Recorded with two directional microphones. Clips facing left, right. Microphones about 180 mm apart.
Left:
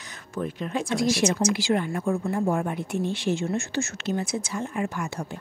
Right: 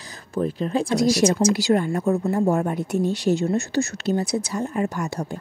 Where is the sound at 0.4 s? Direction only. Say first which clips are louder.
Right 6 dB; 35° right (ahead or behind).